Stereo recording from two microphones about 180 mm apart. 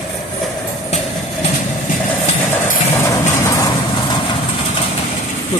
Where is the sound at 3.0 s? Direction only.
15° left (ahead or behind).